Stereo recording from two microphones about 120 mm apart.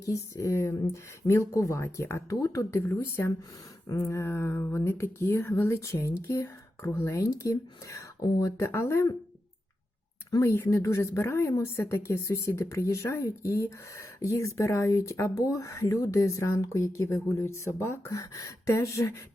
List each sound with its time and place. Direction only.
0.0 s speech: 25° left (ahead or behind)
10.4 s speech: 20° left (ahead or behind)